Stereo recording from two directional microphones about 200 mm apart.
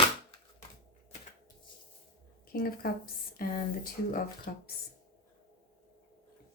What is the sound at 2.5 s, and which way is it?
Speech, 50° left (ahead or behind).